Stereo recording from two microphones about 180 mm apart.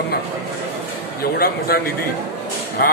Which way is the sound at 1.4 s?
60° left (ahead or behind).